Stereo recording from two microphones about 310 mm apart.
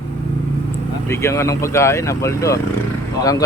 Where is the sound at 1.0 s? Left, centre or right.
Centre.